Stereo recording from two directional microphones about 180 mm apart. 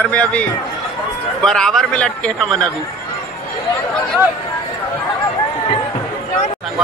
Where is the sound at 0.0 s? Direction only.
5° left (ahead or behind).